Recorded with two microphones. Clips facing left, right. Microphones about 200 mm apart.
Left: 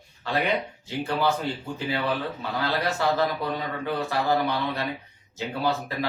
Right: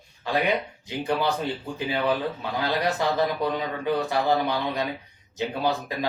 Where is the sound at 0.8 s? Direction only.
15° right (ahead or behind).